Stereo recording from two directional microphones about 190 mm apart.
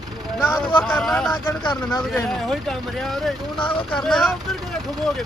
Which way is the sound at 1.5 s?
20° left (ahead or behind).